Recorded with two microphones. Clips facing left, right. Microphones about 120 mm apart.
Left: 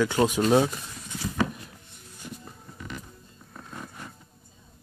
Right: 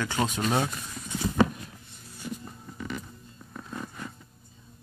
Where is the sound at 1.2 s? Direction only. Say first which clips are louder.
Right 4 dB; 25° right (ahead or behind).